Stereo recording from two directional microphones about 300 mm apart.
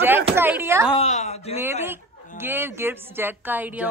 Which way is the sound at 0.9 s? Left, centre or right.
Left.